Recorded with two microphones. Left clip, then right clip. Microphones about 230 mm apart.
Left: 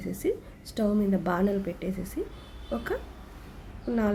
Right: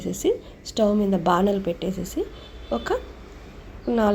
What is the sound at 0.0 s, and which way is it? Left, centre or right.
Speech, centre.